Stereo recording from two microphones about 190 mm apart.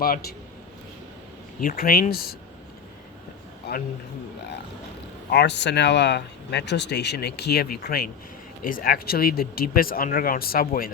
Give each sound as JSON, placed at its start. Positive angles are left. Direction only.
{"t": 1.6, "sound": "speech", "side_deg": 50}
{"t": 3.7, "sound": "speech", "side_deg": 55}
{"t": 5.3, "sound": "speech", "side_deg": 65}